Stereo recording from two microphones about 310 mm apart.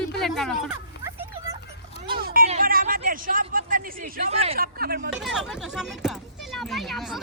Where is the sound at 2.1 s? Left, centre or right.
Right.